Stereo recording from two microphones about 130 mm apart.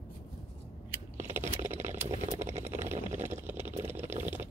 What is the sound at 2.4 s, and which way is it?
Vehicle, 65° right (ahead or behind).